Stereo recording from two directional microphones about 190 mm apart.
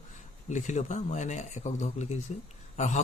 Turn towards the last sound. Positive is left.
turn(degrees=40)  # may be behind; listen again after turning